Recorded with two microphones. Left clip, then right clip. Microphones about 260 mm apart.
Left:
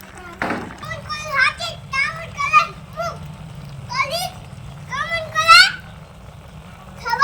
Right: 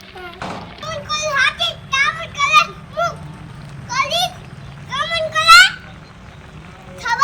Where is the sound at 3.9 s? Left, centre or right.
Centre.